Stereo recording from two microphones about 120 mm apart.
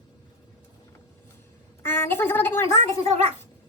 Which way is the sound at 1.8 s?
20° left (ahead or behind).